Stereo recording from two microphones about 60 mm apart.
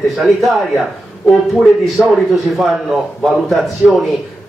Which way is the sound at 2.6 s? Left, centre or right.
Centre.